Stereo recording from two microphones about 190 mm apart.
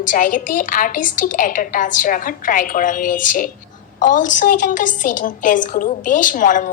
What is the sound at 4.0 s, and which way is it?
A woman's voice, 45° left (ahead or behind).